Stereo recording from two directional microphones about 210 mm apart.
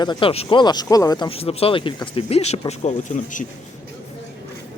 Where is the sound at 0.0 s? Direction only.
20° left (ahead or behind).